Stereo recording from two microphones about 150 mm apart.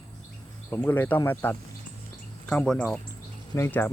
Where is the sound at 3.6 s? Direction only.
15° left (ahead or behind).